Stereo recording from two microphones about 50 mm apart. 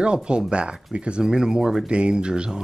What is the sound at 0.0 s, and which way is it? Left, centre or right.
Speech, centre.